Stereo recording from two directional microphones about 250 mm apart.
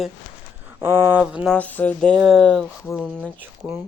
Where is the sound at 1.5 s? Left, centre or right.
Centre.